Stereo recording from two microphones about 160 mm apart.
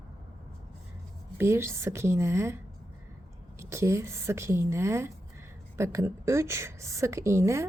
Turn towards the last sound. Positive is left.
turn(degrees=-15)  # may be behind; listen again after turning